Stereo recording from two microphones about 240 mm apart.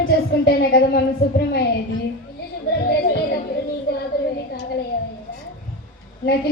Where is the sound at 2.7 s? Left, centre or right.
Left.